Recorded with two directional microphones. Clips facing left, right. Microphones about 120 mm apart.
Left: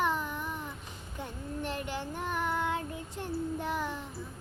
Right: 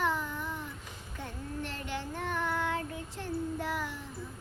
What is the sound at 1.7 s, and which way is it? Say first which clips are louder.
Child singing: left 2 dB; 15° left (ahead or behind).